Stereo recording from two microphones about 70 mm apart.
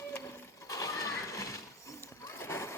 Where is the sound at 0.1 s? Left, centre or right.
Left.